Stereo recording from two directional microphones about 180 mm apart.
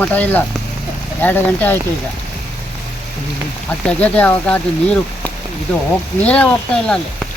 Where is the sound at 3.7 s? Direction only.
10° left (ahead or behind).